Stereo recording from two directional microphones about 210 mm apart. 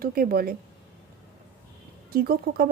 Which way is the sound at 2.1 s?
45° right (ahead or behind).